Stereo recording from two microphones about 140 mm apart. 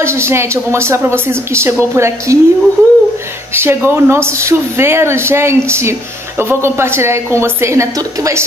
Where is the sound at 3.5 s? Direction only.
15° right (ahead or behind).